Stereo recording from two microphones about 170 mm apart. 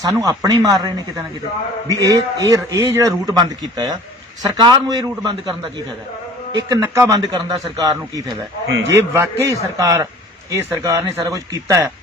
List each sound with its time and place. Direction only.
0.0 s a man's voice: 20° right (ahead or behind)
6.6 s a man's voice: 20° right (ahead or behind)
8.7 s a man's voice: 90° right
9.0 s a man's voice: 15° right (ahead or behind)